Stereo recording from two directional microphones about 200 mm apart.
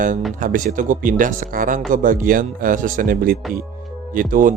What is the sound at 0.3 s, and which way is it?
Speech, 45° right (ahead or behind).